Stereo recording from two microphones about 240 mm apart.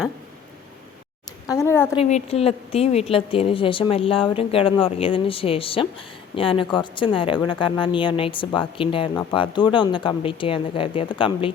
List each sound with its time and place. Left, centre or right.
1.5 s a woman's voice: centre
2.0 s speech: left